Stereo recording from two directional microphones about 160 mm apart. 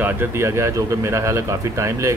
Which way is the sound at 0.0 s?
15° right (ahead or behind).